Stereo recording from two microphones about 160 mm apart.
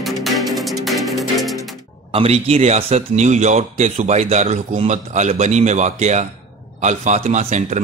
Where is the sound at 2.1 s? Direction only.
35° right (ahead or behind).